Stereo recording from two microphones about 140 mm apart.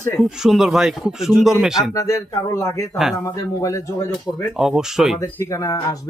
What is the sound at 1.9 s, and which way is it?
Speech, 25° left (ahead or behind).